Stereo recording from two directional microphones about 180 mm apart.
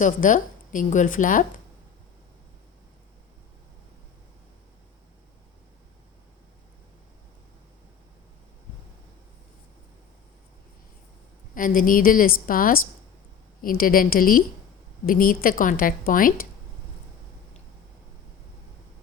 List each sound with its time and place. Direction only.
0.0 s a woman's voice: 45° left (ahead or behind)
11.5 s a woman's voice: 50° left (ahead or behind)